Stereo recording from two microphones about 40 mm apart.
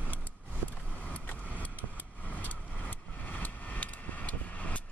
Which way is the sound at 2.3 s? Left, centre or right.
Left.